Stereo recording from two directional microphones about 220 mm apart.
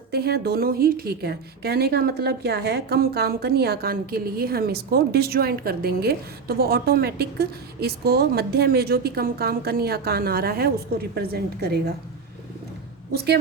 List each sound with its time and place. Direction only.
0.1 s a woman's voice: 45° right (ahead or behind)